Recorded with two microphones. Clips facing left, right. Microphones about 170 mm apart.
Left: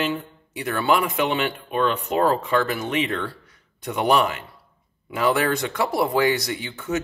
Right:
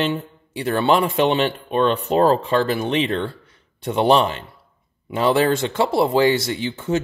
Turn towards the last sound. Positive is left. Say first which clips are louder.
# right 4 dB
turn(degrees=-25)  # may be behind; listen again after turning